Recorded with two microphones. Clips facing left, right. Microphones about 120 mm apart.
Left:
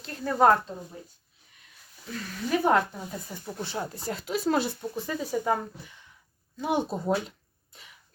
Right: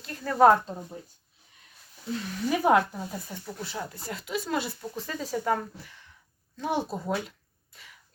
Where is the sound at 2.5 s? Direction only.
5° right (ahead or behind).